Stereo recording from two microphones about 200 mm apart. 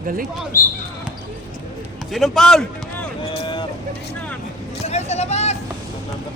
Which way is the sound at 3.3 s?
25° left (ahead or behind).